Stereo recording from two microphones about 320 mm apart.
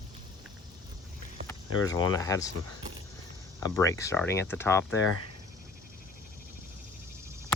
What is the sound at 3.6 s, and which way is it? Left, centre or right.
Speech, centre.